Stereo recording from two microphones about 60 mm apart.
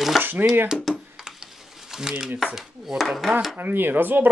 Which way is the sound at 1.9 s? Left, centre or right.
Centre.